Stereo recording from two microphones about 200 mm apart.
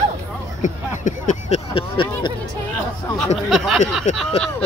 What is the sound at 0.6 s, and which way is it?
Speech, 40° left (ahead or behind).